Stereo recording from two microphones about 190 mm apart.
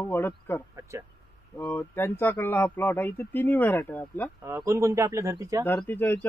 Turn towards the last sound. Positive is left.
turn(degrees=10)  # may be behind; listen again after turning